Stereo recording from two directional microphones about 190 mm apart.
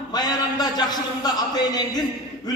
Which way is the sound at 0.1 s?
20° left (ahead or behind).